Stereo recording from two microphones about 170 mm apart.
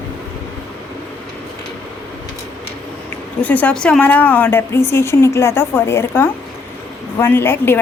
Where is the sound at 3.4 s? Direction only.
10° left (ahead or behind).